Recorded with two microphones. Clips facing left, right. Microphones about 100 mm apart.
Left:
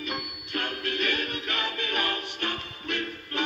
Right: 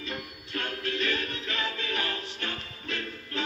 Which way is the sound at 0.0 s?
70° left (ahead or behind).